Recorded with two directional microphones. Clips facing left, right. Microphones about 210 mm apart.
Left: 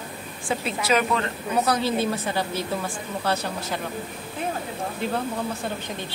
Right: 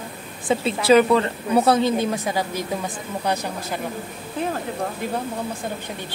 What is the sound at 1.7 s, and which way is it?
Speech, 20° right (ahead or behind).